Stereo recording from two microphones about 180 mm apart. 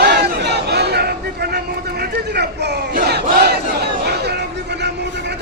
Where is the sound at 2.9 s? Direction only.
60° right (ahead or behind).